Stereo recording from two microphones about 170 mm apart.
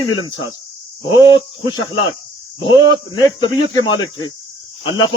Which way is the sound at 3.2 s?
25° left (ahead or behind).